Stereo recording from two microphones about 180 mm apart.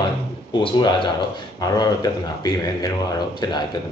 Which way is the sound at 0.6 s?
25° left (ahead or behind).